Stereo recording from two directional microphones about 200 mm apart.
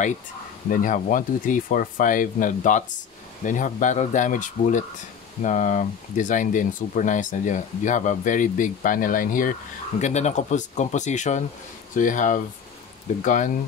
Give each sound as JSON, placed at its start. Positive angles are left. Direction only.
{"t": 0.7, "sound": "speech", "side_deg": 40}